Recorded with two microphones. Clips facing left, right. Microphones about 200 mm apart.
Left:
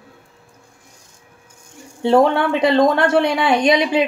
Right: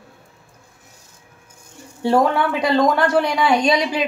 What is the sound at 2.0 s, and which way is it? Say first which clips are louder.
Speech: left 3 dB; 25° left (ahead or behind).